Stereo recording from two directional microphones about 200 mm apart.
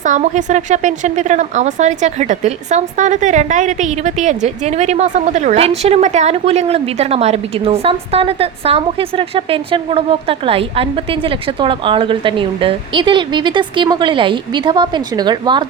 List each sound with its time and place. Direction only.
0.0 s a woman's voice: 40° right (ahead or behind); by 15.6 s 20° right (ahead or behind)